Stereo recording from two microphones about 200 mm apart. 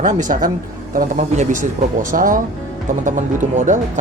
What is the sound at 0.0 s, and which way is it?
Speech, 40° right (ahead or behind).